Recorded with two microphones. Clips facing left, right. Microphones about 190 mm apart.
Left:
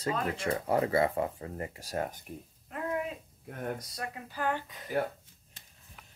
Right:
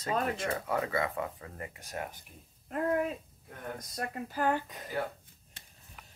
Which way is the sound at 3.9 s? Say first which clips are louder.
Right 3 dB; 45° right (ahead or behind).